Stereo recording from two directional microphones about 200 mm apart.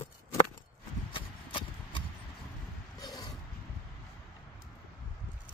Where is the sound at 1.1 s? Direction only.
25° left (ahead or behind).